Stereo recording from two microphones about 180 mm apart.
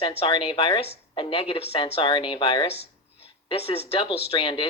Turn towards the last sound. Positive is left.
turn(degrees=30)  # may be behind; listen again after turning